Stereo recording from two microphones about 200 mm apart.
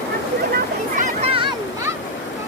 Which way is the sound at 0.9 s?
40° right (ahead or behind).